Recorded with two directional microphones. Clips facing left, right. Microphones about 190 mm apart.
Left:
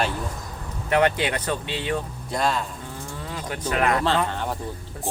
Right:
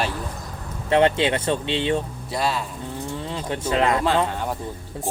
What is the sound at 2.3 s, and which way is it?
Speech, 5° right (ahead or behind).